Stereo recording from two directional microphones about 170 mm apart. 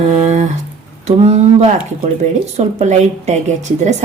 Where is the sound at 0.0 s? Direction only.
40° right (ahead or behind).